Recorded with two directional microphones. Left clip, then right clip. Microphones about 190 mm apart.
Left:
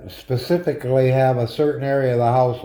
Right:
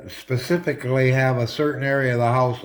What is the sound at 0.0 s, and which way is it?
Speech, 20° right (ahead or behind).